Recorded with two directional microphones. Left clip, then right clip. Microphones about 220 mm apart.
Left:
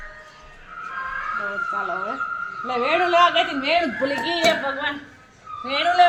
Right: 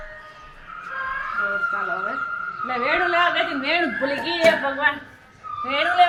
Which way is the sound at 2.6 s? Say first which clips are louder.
Left 1 dB; 25° left (ahead or behind).